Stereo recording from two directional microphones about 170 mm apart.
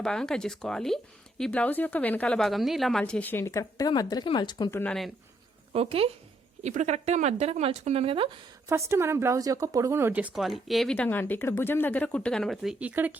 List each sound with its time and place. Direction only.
0.0 s a woman's voice: 5° left (ahead or behind); by 4.7 s 25° left (ahead or behind)
4.7 s speech: 10° left (ahead or behind)
5.7 s speech: 35° right (ahead or behind)
8.7 s speech: 15° right (ahead or behind)